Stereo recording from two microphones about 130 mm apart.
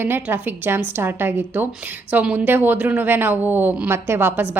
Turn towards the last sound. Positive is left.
turn(degrees=-15)  # may be behind; listen again after turning